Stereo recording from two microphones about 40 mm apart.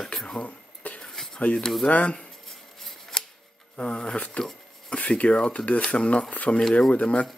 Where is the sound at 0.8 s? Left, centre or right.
Left.